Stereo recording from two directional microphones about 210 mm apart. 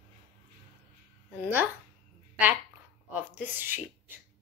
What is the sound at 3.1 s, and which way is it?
Speech, 10° right (ahead or behind).